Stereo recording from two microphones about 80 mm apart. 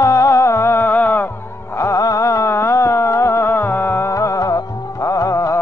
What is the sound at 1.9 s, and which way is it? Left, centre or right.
Music, left.